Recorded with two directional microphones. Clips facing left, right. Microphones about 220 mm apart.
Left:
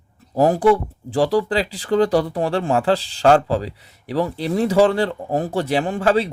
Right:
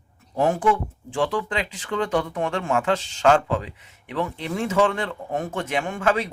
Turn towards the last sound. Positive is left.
turn(degrees=35)  # may be behind; listen again after turning